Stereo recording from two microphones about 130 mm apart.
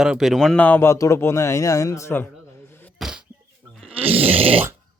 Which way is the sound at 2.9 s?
5° right (ahead or behind).